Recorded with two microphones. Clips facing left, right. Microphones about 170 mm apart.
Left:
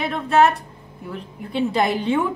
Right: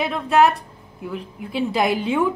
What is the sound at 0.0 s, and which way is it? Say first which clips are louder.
A woman's voice: even; centre (ahead or behind).